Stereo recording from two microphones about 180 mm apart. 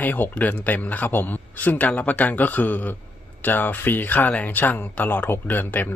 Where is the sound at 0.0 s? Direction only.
10° left (ahead or behind).